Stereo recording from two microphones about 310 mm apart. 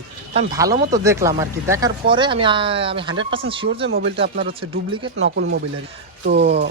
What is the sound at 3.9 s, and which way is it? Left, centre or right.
Speech, right.